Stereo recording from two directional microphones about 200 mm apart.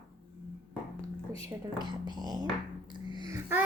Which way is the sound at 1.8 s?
20° right (ahead or behind).